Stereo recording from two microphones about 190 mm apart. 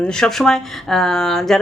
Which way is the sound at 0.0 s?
5° left (ahead or behind).